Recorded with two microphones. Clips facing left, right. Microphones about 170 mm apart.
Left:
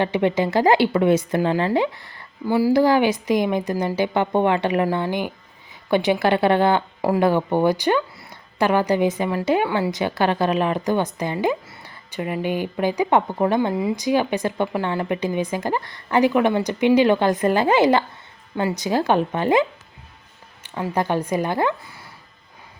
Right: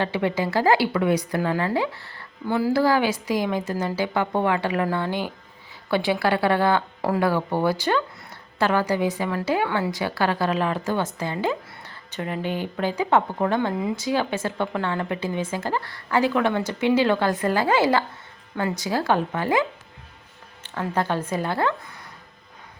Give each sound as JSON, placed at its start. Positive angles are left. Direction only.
{"t": 0.0, "sound": "speech", "side_deg": 20}
{"t": 2.8, "sound": "a woman's voice", "side_deg": 20}
{"t": 20.9, "sound": "a woman's voice", "side_deg": 15}